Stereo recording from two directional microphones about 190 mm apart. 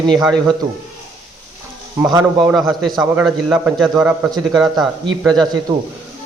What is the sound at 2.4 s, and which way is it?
A man's voice, 10° right (ahead or behind).